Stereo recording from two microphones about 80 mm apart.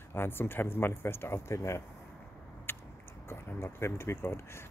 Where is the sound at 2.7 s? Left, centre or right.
Left.